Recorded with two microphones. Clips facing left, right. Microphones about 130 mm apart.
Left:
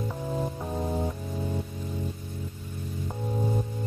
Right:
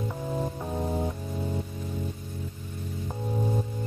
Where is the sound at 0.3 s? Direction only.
Centre (ahead or behind).